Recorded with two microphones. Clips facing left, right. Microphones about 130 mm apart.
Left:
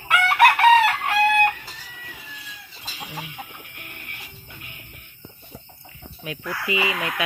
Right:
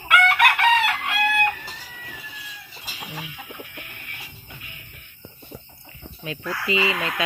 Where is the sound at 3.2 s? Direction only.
50° left (ahead or behind).